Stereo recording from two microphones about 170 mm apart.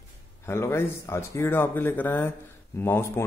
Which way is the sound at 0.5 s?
15° left (ahead or behind).